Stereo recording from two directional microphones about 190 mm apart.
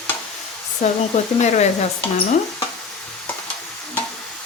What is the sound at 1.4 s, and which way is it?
Speech, 35° left (ahead or behind).